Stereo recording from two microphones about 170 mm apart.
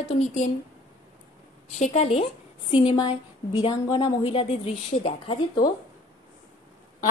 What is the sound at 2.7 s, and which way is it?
A woman's voice, 25° left (ahead or behind).